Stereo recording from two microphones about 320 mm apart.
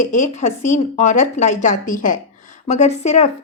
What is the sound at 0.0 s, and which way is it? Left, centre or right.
A woman's voice, left.